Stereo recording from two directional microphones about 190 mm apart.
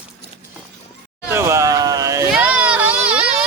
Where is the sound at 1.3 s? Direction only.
15° right (ahead or behind).